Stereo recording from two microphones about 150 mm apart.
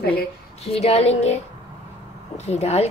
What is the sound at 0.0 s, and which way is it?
Speech, 90° left.